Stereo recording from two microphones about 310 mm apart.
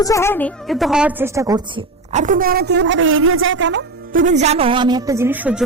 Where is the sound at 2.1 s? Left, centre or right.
Right.